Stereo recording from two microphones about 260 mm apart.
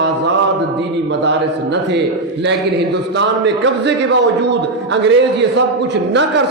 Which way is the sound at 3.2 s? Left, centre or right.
Right.